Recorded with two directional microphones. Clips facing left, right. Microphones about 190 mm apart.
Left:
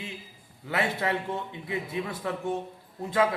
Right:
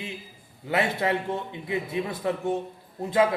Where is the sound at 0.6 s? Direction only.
20° right (ahead or behind).